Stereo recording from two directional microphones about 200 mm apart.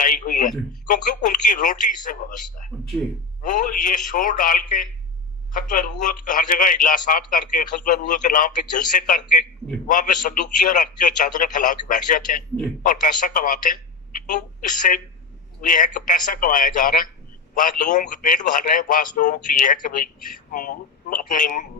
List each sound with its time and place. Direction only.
0.0 s a sound: 40° left (ahead or behind)
0.9 s a man's voice: 40° left (ahead or behind)
2.7 s speech: 5° left (ahead or behind)
3.4 s a man's voice: 40° left (ahead or behind)